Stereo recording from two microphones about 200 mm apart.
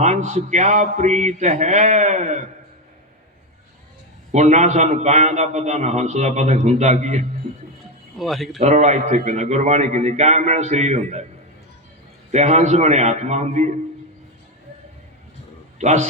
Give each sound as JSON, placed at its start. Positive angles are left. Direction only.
{"t": 0.0, "sound": "a man's voice", "side_deg": -35}
{"t": 4.3, "sound": "a man's voice", "side_deg": -35}
{"t": 8.2, "sound": "speech", "side_deg": 0}
{"t": 8.5, "sound": "a man's voice", "side_deg": -35}
{"t": 12.3, "sound": "a man's voice", "side_deg": -35}
{"t": 15.8, "sound": "a man's voice", "side_deg": -35}